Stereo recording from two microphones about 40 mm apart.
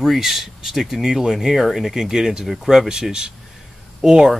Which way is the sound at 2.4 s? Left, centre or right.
Centre.